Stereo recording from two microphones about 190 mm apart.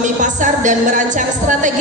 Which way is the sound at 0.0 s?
40° right (ahead or behind).